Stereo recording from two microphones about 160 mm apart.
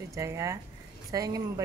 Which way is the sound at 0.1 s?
20° right (ahead or behind).